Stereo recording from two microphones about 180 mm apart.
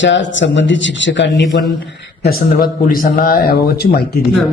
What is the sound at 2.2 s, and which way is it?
Speech, 55° left (ahead or behind).